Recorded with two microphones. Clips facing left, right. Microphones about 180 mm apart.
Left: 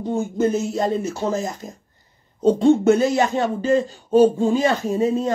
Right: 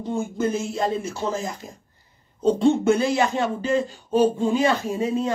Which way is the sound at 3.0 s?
40° left (ahead or behind).